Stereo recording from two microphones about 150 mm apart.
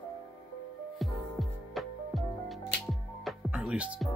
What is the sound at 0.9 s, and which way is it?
Music, centre (ahead or behind).